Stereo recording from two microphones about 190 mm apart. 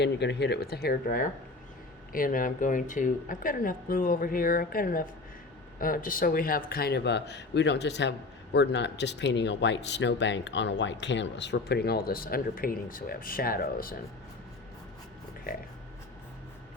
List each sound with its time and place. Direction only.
0.0 s speech: 65° left (ahead or behind)